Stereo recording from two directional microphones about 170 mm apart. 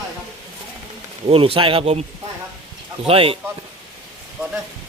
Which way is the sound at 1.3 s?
35° right (ahead or behind).